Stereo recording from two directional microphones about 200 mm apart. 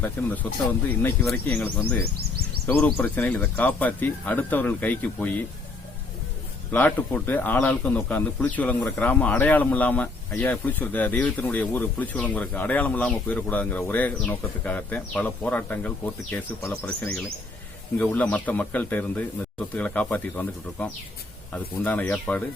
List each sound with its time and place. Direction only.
0.0 s a man's voice: 10° left (ahead or behind)
6.7 s a man's voice: 10° left (ahead or behind)